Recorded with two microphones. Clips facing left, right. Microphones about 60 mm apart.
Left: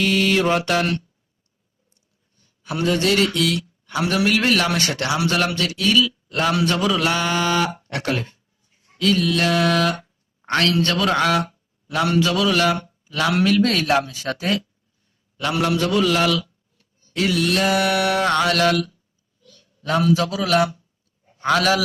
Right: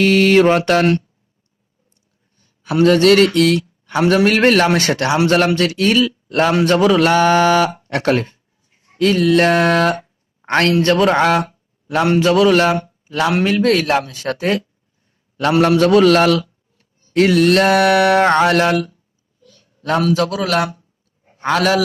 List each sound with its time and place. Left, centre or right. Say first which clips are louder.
0.0 s mantra: right 7 dB; right
2.6 s speech: right 9 dB; right
8.7 s a sound: right 4 dB; right
13.6 s a man's voice: right 3 dB; centre
15.4 s a man's voice: right 8 dB; right
20.6 s mantra: right 1 dB; right
21.5 s speech: right 3 dB; centre